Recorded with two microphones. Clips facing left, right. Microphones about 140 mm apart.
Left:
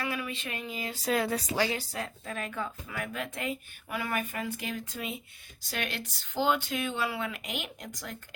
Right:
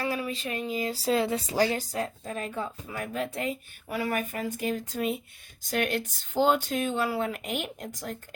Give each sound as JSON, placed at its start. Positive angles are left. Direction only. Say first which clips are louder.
{"t": 0.0, "sound": "speech", "louder": "right 4 dB", "side_deg": -35}